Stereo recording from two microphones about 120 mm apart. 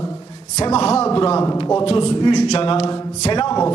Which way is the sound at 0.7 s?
60° left (ahead or behind).